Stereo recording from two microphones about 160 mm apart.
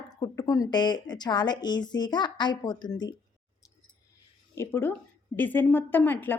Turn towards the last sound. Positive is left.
turn(degrees=10)  # may be behind; listen again after turning